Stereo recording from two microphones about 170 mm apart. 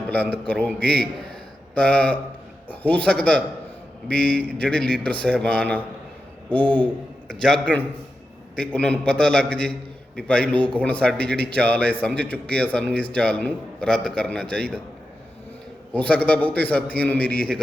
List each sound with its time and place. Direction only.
0.1 s a man's voice: 10° left (ahead or behind)
15.9 s a man's voice: 10° left (ahead or behind)